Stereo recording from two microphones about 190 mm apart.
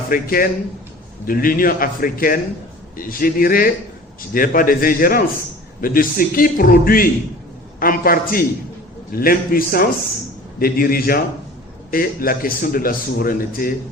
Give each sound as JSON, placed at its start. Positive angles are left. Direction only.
{"t": 0.1, "sound": "a man's voice", "side_deg": 50}